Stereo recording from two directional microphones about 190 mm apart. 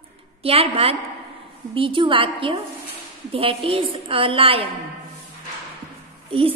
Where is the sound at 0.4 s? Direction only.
30° right (ahead or behind).